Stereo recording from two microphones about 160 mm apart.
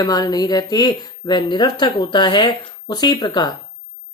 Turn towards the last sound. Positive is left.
turn(degrees=25)  # may be behind; listen again after turning